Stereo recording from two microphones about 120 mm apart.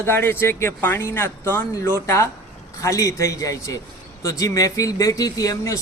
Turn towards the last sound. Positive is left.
turn(degrees=30)  # may be behind; listen again after turning